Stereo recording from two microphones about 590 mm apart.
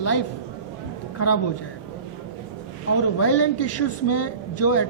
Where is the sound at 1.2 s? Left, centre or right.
Left.